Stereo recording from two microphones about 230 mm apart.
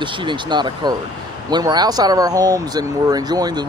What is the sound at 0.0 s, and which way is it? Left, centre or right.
Speech, right.